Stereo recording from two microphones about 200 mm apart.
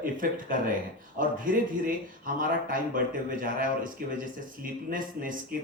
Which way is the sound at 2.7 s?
45° right (ahead or behind).